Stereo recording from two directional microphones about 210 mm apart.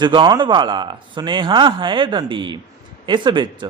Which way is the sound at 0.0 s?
20° right (ahead or behind).